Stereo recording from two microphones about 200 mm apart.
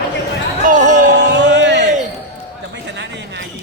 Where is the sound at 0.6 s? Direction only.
40° right (ahead or behind).